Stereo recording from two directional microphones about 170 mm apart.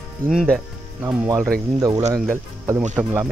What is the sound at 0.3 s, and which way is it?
Speech, 5° right (ahead or behind).